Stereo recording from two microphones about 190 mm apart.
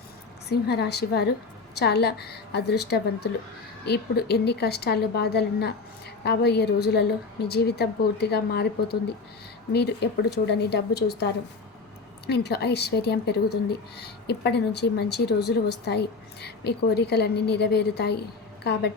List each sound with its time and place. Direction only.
0.4 s a woman's voice: 60° left (ahead or behind)